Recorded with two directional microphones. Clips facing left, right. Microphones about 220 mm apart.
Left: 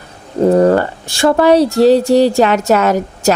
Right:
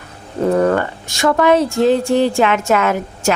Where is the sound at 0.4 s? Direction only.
30° left (ahead or behind).